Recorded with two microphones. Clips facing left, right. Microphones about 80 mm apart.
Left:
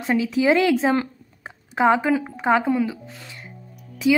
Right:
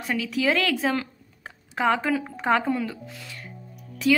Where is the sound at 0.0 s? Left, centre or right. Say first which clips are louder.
Left 5 dB; left.